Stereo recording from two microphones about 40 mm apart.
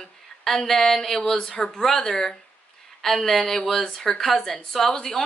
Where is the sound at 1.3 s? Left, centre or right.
Left.